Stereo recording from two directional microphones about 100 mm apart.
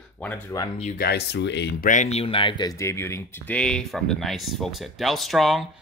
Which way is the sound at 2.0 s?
80° left.